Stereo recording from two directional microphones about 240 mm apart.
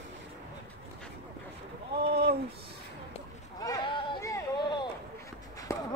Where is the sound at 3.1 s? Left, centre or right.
Centre.